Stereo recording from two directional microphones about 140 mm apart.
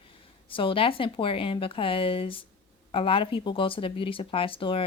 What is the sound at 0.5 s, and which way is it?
Speech, 40° left (ahead or behind).